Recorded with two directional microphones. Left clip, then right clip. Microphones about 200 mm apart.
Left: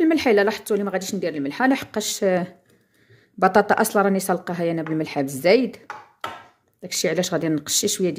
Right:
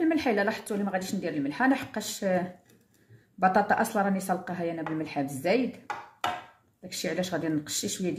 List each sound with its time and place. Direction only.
0.0 s speech: 50° left (ahead or behind)
6.9 s speech: 50° left (ahead or behind)